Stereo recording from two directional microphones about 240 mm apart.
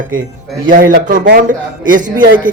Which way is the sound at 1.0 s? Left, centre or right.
Right.